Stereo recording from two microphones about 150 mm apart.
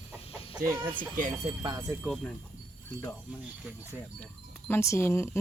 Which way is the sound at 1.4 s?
25° right (ahead or behind).